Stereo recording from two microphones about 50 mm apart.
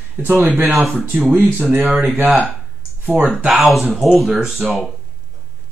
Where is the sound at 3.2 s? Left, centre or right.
Right.